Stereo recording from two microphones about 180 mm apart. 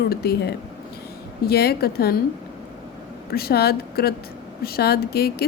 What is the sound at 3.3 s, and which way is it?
A woman's voice, 60° left (ahead or behind).